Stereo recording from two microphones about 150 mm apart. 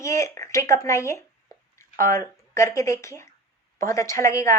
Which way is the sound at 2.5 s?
20° left (ahead or behind).